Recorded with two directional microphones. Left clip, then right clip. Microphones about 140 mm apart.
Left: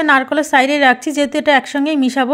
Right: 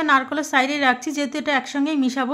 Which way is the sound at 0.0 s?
35° left (ahead or behind).